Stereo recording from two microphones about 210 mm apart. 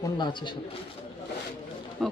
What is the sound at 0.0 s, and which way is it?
Speech, 20° left (ahead or behind).